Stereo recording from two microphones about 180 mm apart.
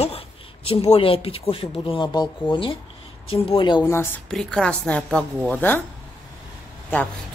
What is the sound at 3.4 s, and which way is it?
Speech, 25° left (ahead or behind).